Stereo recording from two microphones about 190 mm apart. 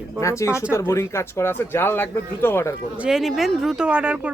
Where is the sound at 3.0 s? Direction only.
Centre (ahead or behind).